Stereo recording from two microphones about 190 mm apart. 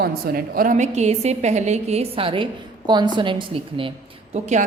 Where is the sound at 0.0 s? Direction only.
50° right (ahead or behind).